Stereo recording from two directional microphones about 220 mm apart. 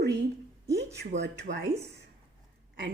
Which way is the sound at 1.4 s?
45° right (ahead or behind).